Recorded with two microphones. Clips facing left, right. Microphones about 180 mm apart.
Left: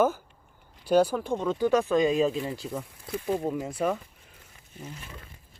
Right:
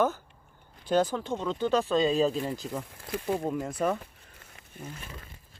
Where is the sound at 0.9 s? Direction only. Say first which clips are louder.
Left 3 dB; 10° left (ahead or behind).